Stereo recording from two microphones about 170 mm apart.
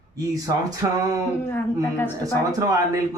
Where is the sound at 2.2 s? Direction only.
20° right (ahead or behind).